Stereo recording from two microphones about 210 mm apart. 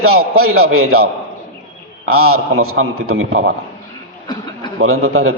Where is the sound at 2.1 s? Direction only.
90° right.